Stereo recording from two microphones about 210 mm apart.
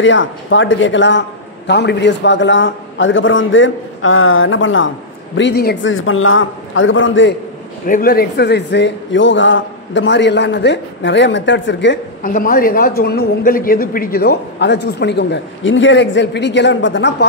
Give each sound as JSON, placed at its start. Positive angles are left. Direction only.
{"t": 0.0, "sound": "a man's voice", "side_deg": 65}
{"t": 5.9, "sound": "a man's voice", "side_deg": 75}
{"t": 7.8, "sound": "a man's voice", "side_deg": 40}
{"t": 12.2, "sound": "a man's voice", "side_deg": 40}